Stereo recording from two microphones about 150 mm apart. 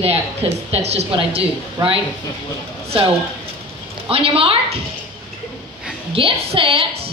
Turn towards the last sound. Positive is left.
turn(degrees=-35)  # may be behind; listen again after turning